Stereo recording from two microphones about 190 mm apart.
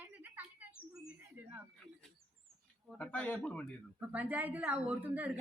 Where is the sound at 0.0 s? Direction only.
10° right (ahead or behind).